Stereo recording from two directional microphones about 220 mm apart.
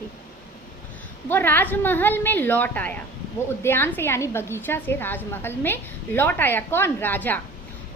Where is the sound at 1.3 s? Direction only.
10° left (ahead or behind).